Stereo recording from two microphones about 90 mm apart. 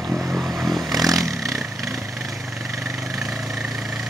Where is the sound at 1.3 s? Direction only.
35° right (ahead or behind).